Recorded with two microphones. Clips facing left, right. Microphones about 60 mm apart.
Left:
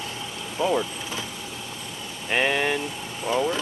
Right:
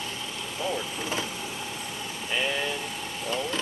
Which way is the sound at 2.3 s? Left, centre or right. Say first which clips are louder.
Left 6 dB; left.